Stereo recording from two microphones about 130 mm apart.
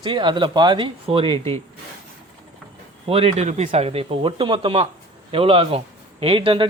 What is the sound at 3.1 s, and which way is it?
Speech, 50° right (ahead or behind).